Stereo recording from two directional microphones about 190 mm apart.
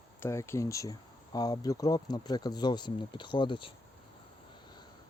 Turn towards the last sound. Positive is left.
turn(degrees=25)  # may be behind; listen again after turning